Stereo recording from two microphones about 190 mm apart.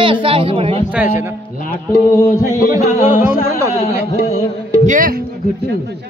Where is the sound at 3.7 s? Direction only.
35° left (ahead or behind).